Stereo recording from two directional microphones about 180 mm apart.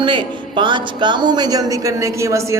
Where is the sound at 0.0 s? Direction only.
25° right (ahead or behind).